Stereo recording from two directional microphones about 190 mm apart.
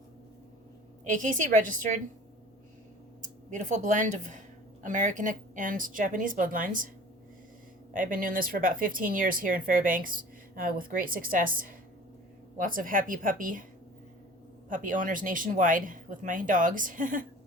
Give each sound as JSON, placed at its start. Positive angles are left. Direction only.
{"t": 1.0, "sound": "speech", "side_deg": -45}
{"t": 3.2, "sound": "speech", "side_deg": -40}
{"t": 7.9, "sound": "speech", "side_deg": -45}
{"t": 14.7, "sound": "speech", "side_deg": -45}